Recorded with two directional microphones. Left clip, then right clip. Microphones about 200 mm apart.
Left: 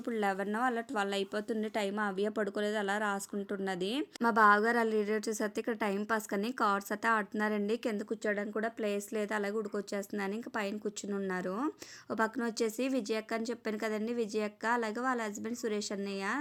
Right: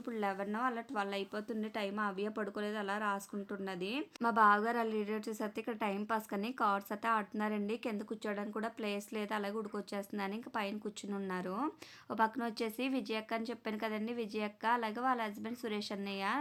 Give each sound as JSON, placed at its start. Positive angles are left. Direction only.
{"t": 0.0, "sound": "a woman's voice", "side_deg": 25}